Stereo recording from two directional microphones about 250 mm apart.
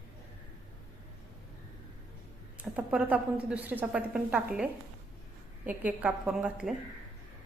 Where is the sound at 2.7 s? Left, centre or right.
Centre.